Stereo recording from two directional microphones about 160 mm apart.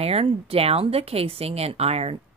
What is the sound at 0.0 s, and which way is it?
Speech, 40° right (ahead or behind).